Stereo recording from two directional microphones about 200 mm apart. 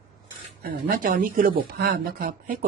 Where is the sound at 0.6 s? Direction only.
45° right (ahead or behind).